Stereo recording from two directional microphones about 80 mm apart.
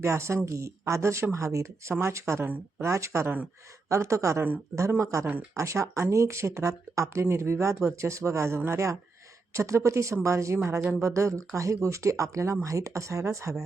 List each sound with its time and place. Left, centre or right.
0.0 s speech: right